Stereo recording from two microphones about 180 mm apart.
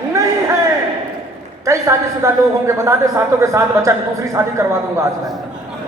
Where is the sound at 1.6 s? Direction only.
15° right (ahead or behind).